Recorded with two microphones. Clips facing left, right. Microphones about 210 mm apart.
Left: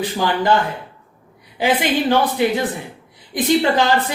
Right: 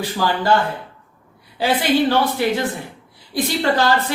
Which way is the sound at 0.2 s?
20° left (ahead or behind).